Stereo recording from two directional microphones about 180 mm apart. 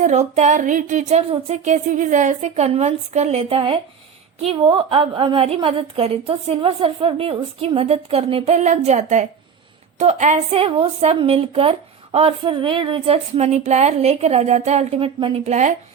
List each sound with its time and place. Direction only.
0.0 s a woman's voice: 40° right (ahead or behind)